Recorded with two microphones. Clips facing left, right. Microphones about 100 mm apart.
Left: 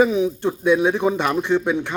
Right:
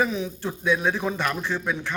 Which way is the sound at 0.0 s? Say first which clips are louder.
Left 8 dB; 15° left (ahead or behind).